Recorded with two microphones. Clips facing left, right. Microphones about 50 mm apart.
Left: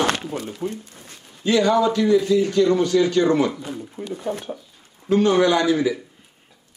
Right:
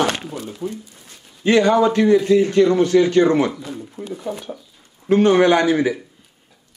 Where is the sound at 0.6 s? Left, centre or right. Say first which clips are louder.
Even; left.